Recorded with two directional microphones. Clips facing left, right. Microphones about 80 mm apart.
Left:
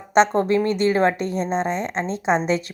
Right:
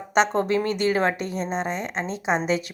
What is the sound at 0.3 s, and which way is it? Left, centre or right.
Speech, right.